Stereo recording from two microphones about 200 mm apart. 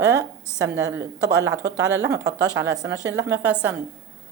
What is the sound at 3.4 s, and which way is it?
Speech, 5° right (ahead or behind).